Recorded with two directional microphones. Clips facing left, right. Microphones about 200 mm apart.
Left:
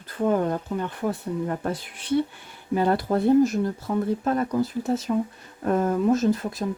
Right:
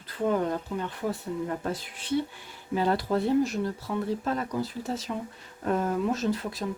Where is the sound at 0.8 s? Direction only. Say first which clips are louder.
Left 4 dB; 55° left (ahead or behind).